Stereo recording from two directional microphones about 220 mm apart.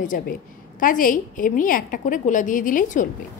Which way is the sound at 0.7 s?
40° left (ahead or behind).